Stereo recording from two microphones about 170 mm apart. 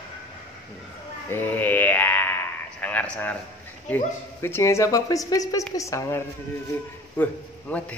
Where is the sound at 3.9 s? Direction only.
15° left (ahead or behind).